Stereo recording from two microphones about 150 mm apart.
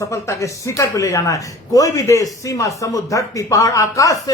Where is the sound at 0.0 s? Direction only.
20° left (ahead or behind).